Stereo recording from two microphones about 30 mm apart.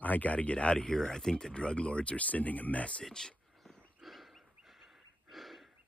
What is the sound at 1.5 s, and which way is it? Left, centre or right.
Speech, left.